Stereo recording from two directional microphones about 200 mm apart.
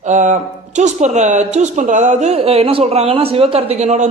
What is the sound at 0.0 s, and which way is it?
Speech, 35° right (ahead or behind).